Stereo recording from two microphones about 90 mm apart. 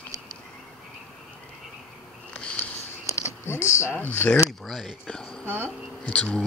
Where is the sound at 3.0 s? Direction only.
30° left (ahead or behind).